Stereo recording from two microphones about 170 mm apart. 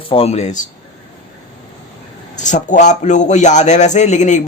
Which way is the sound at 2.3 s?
45° left (ahead or behind).